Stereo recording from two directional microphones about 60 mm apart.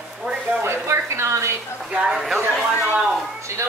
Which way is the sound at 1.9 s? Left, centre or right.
Centre.